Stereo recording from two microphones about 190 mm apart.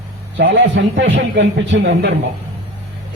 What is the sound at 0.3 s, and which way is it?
A man's voice, 70° right (ahead or behind).